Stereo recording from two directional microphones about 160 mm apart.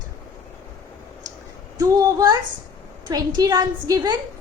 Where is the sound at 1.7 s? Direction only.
25° right (ahead or behind).